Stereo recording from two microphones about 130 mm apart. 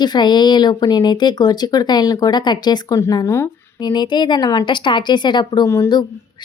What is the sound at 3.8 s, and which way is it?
Speech, 35° left (ahead or behind).